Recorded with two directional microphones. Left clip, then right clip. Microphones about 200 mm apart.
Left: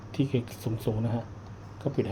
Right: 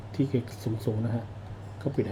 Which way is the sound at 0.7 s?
15° left (ahead or behind).